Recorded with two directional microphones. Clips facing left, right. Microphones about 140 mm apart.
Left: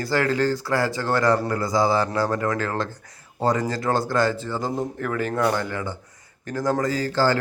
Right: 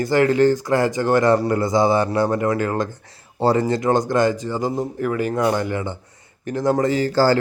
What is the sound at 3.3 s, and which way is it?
A man's voice, 30° right (ahead or behind).